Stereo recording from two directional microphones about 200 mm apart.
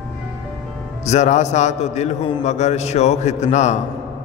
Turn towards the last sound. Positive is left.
turn(degrees=35)  # may be behind; listen again after turning